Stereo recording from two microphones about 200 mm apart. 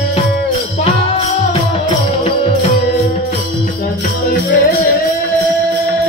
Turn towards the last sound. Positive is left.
turn(degrees=50)  # may be behind; listen again after turning